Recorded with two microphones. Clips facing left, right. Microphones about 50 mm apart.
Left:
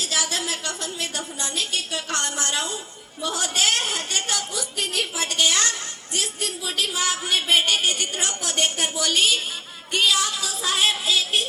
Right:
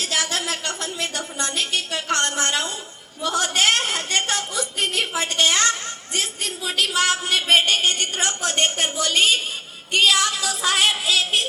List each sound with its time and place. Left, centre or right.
0.0 s a woman's voice: right
6.7 s a woman's voice: right
9.9 s music: right